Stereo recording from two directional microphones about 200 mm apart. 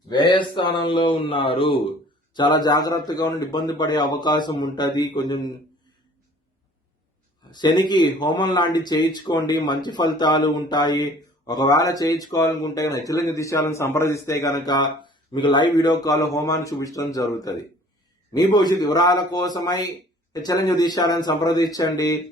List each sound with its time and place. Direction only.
0.1 s speech: 20° left (ahead or behind)
7.5 s a man's voice: 20° left (ahead or behind)